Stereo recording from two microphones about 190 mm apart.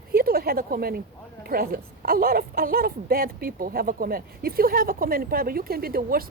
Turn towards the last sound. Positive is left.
turn(degrees=-50)  # may be behind; listen again after turning